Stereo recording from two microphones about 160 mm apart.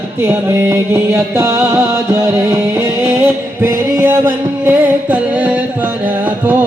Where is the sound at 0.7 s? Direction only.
15° right (ahead or behind).